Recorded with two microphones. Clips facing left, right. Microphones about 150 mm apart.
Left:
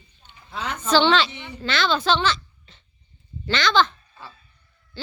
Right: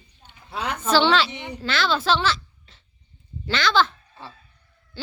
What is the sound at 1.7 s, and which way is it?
A child's voice, 5° right (ahead or behind).